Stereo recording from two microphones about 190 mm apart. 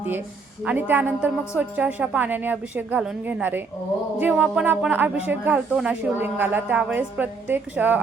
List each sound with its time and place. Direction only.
0.6 s speech: 10° right (ahead or behind)